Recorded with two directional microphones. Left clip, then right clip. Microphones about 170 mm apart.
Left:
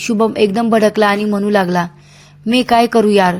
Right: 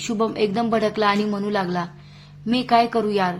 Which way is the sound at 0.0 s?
35° left (ahead or behind).